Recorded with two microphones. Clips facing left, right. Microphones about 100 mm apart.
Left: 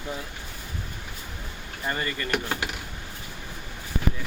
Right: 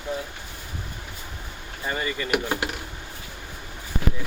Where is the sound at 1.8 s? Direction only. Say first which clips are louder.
Right 2 dB; 5° right (ahead or behind).